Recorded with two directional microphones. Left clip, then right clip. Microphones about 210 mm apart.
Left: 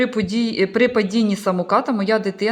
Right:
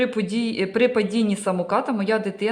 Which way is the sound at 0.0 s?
15° left (ahead or behind).